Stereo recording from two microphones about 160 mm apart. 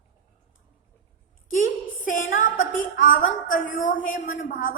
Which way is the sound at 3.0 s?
55° left (ahead or behind).